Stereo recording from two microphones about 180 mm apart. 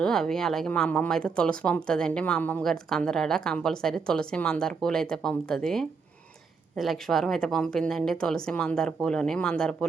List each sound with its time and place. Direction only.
0.0 s speech: 5° left (ahead or behind)